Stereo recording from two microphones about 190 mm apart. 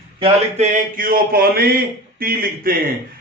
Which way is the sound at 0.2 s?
35° right (ahead or behind).